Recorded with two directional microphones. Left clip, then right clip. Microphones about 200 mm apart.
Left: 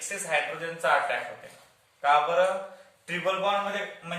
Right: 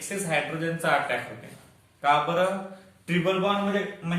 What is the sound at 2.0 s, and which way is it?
Speech, 10° right (ahead or behind).